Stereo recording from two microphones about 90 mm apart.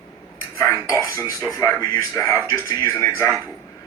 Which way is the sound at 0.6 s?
40° left (ahead or behind).